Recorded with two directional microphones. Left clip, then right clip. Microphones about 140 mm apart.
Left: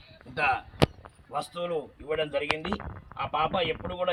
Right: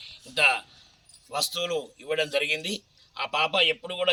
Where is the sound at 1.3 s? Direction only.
5° right (ahead or behind).